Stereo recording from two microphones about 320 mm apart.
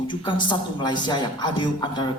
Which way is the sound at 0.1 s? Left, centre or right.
Centre.